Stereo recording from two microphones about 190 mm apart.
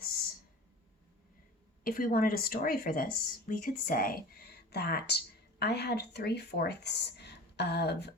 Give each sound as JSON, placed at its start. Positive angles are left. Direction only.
{"t": 1.8, "sound": "speech", "side_deg": 50}